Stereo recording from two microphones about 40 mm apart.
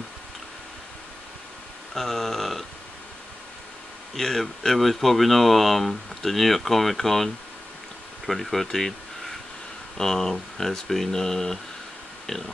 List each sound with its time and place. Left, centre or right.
2.0 s speech: centre
4.1 s speech: centre
8.3 s speech: centre